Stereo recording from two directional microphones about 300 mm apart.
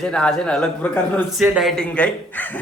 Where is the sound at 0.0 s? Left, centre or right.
Centre.